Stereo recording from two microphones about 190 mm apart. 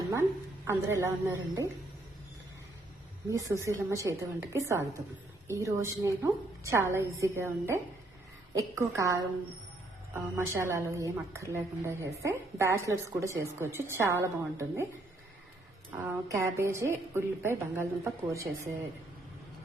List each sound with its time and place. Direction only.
0.1 s a woman's voice: 15° right (ahead or behind)
3.2 s a woman's voice: 15° right (ahead or behind)
10.3 s a woman's voice: 15° right (ahead or behind)
15.9 s a woman's voice: 10° right (ahead or behind)